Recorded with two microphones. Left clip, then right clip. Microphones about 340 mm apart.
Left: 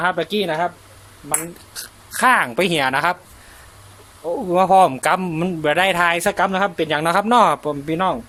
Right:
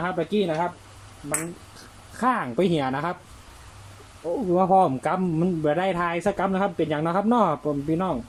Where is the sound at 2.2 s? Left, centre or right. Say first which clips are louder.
Left 8 dB; left.